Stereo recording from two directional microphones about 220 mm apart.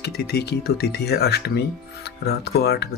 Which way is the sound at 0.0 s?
50° left (ahead or behind).